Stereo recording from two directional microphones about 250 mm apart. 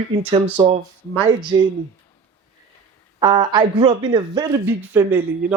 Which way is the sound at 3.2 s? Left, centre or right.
Centre.